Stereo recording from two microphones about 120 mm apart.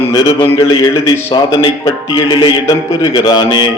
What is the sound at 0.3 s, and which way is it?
Speech, 50° left (ahead or behind).